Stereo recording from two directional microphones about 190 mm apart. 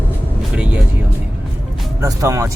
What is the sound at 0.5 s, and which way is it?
Music, 5° right (ahead or behind).